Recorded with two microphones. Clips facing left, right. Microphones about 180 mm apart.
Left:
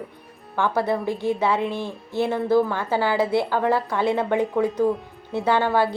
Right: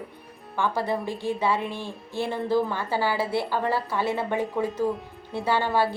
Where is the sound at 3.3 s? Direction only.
15° left (ahead or behind).